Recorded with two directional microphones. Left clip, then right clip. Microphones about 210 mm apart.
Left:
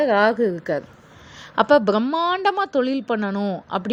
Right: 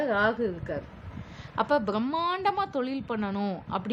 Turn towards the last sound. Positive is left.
turn(degrees=25)  # may be behind; listen again after turning